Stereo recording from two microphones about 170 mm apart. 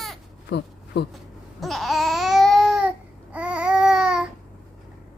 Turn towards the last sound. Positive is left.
turn(degrees=-5)  # may be behind; listen again after turning